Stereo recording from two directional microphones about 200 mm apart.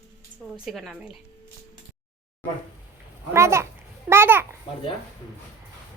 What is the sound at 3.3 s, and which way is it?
Speech, 15° right (ahead or behind).